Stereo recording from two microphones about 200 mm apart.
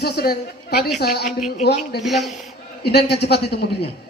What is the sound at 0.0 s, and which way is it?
A man's voice, 50° left (ahead or behind).